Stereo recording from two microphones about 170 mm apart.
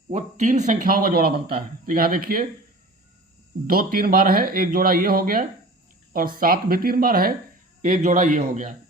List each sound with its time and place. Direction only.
0.1 s speech: 45° right (ahead or behind)
3.7 s speech: 55° right (ahead or behind)
7.8 s a man's voice: 50° right (ahead or behind)